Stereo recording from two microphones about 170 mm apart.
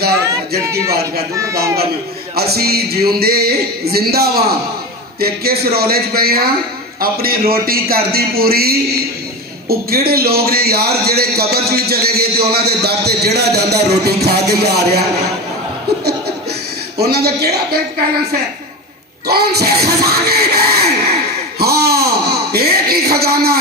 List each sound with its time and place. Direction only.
0.6 s speech: 20° right (ahead or behind)
2.3 s a man's voice: 65° right (ahead or behind)
17.0 s a man's voice: 70° right (ahead or behind)
19.2 s a sound: 70° right (ahead or behind)